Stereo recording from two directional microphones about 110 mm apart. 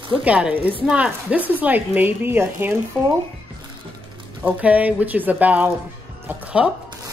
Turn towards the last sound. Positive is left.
turn(degrees=-10)  # may be behind; listen again after turning